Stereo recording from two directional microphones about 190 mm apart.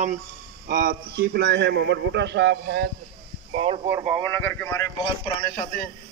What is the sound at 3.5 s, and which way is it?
Speech, 30° right (ahead or behind).